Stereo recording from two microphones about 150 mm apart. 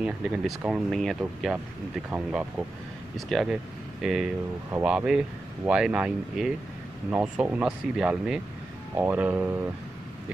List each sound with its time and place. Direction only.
0.0 s speech: 5° right (ahead or behind)